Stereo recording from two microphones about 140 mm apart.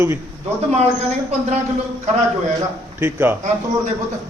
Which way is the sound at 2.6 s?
15° right (ahead or behind).